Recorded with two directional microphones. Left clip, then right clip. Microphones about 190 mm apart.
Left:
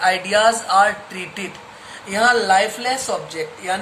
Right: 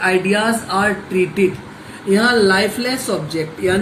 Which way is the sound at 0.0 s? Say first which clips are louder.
Left 1 dB; 25° left (ahead or behind).